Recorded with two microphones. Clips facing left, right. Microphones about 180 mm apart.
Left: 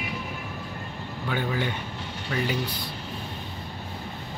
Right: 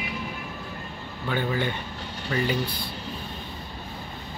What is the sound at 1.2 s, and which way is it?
Speech, 5° left (ahead or behind).